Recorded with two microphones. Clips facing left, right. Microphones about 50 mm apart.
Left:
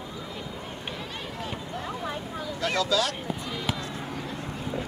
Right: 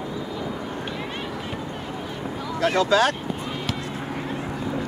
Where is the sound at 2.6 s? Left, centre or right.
Right.